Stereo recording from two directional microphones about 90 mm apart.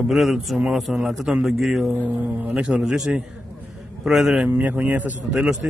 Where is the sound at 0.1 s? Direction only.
Centre (ahead or behind).